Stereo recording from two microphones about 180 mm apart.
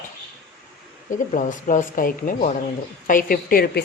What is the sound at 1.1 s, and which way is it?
Speech, 45° left (ahead or behind).